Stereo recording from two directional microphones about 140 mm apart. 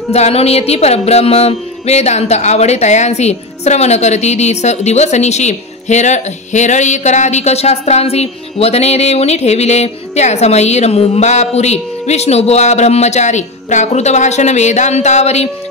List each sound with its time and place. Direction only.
0.1 s music: 50° left (ahead or behind)